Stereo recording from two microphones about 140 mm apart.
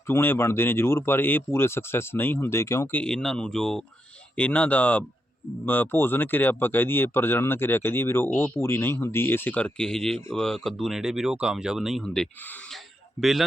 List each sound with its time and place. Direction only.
0.1 s speech: 15° left (ahead or behind)
3.0 s speech: 5° left (ahead or behind)